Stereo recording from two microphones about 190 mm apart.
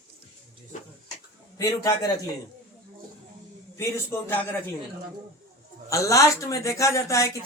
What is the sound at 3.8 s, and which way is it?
Speech, 10° left (ahead or behind).